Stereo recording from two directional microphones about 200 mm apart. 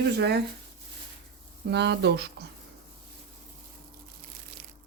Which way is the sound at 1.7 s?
55° right (ahead or behind).